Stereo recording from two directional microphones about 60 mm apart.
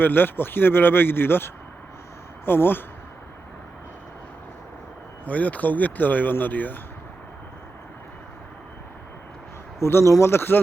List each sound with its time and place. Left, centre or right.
0.0 s speech: left
5.2 s speech: left
9.8 s speech: left